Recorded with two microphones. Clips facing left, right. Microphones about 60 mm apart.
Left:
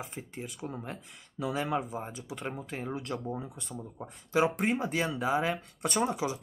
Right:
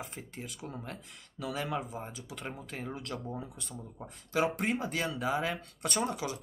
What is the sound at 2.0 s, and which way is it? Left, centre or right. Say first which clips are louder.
Speech: left 4 dB; centre.